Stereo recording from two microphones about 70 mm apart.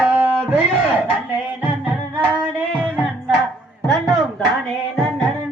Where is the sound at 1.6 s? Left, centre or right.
Right.